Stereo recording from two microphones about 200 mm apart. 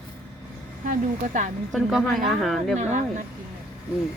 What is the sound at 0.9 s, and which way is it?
Speech, 40° right (ahead or behind).